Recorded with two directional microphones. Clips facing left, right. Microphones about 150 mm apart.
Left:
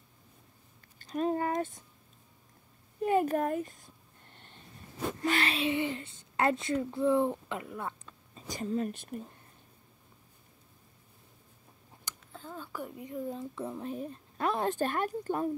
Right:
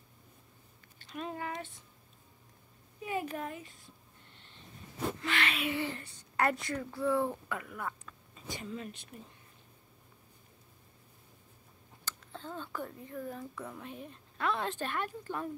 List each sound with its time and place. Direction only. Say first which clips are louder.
0.9 s a sound: left 10 dB; 40° left (ahead or behind)
3.0 s a woman's voice: left 9 dB; 50° left (ahead or behind)
5.2 s a woman's voice: left 7 dB; 35° left (ahead or behind)
12.3 s speech: right 1 dB; 5° left (ahead or behind); by 15.5 s 40° left (ahead or behind)